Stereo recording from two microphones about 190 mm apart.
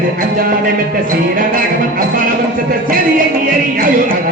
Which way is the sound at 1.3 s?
45° right (ahead or behind).